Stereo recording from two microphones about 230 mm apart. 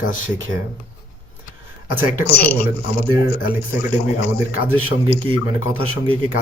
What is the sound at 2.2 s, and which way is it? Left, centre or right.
Speech, left.